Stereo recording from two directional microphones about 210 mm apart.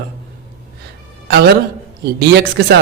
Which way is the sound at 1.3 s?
50° right (ahead or behind).